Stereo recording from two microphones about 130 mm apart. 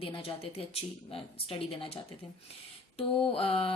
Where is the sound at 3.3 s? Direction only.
45° left (ahead or behind).